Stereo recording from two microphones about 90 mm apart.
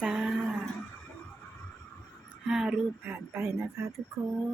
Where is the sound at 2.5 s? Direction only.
10° right (ahead or behind).